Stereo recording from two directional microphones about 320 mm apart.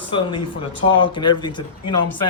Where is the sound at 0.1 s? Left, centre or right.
Centre.